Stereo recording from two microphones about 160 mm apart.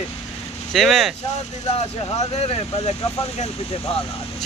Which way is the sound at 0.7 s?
Centre (ahead or behind).